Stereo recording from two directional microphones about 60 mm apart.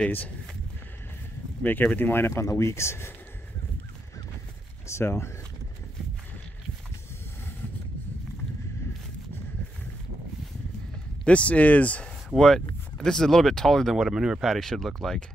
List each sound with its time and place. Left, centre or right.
1.6 s speech: left
2.2 s speech: left
4.8 s speech: left
11.2 s speech: left
12.4 s speech: centre
13.9 s speech: centre
14.5 s speech: centre